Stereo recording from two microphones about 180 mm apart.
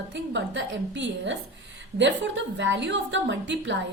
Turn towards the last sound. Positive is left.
turn(degrees=-85)